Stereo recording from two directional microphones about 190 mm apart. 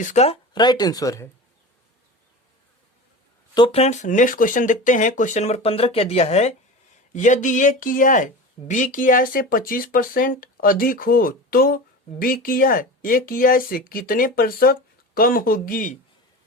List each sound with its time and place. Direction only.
0.0 s speech: 35° left (ahead or behind)
0.5 s speech: 20° left (ahead or behind)
3.5 s speech: 30° left (ahead or behind); by 16.0 s 45° left (ahead or behind)